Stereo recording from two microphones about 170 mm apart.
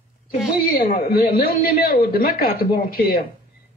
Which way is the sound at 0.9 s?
60° left (ahead or behind).